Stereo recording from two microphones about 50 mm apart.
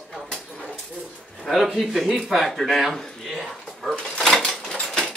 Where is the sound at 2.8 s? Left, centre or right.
Centre.